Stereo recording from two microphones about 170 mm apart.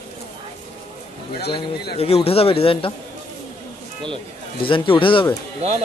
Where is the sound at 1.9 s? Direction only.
35° left (ahead or behind).